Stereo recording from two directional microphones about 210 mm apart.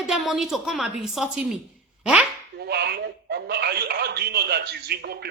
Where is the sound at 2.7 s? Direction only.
50° right (ahead or behind).